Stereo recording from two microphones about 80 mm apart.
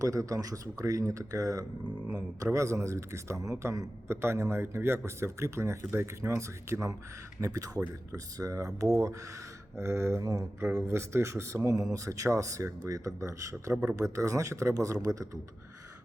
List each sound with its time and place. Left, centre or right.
0.0 s speech: right